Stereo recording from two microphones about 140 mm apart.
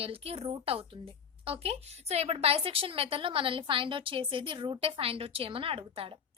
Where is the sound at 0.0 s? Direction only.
45° right (ahead or behind).